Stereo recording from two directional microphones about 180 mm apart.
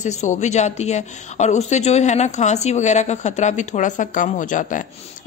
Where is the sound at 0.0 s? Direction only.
40° left (ahead or behind).